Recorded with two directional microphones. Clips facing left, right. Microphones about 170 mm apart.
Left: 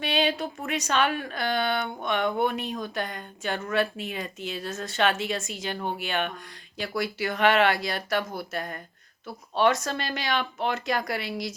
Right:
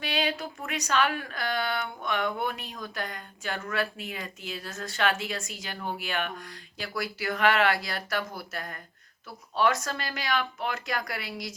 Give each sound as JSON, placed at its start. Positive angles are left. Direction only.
{"t": 0.0, "sound": "speech", "side_deg": 25}